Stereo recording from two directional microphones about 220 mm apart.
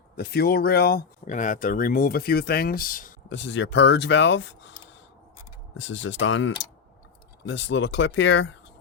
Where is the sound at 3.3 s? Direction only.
55° left (ahead or behind).